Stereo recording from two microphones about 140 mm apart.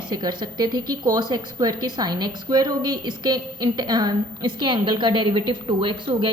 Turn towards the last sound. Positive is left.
turn(degrees=-35)  # may be behind; listen again after turning